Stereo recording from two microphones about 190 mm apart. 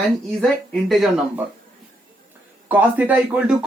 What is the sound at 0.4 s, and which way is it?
Speech, centre (ahead or behind).